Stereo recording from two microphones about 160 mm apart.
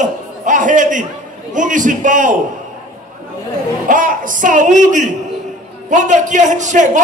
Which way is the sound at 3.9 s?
55° right (ahead or behind).